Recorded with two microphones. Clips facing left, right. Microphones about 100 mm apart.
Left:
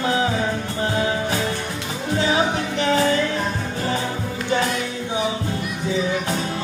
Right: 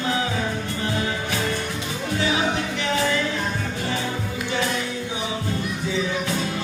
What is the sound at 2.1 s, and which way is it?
Music, 35° left (ahead or behind).